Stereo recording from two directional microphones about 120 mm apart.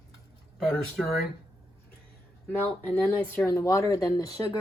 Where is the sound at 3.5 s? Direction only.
25° left (ahead or behind).